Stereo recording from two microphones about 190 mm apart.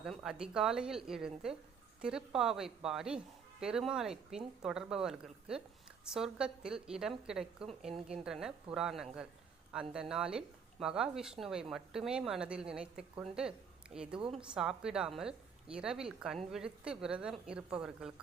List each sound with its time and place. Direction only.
0.0 s speech: 5° right (ahead or behind)
14.2 s a woman's voice: 30° right (ahead or behind)
14.4 s speech: 5° right (ahead or behind)